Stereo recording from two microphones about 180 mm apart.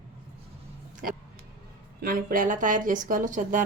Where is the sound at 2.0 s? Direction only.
50° right (ahead or behind).